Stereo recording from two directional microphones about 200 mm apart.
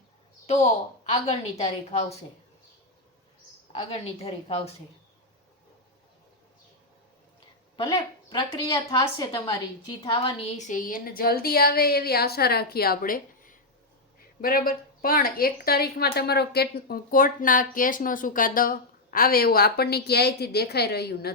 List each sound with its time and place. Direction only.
0.4 s a woman's voice: 30° left (ahead or behind)
3.8 s a woman's voice: 30° left (ahead or behind)
7.8 s a woman's voice: 20° left (ahead or behind)
10.7 s speech: 40° left (ahead or behind)